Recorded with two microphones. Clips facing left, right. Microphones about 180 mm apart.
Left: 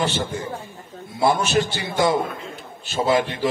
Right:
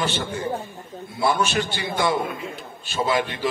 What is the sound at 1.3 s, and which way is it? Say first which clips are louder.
Speech: left 2 dB; 40° left (ahead or behind).